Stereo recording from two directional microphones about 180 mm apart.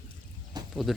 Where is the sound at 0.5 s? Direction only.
25° right (ahead or behind).